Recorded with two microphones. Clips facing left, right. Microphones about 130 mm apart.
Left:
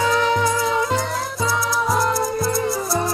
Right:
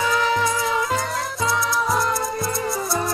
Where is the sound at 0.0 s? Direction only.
25° left (ahead or behind).